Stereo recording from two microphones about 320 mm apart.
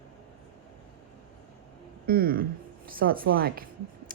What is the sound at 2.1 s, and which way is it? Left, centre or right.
A woman's voice, right.